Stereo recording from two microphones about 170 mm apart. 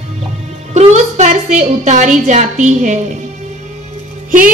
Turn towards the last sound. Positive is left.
turn(degrees=-50)  # may be behind; listen again after turning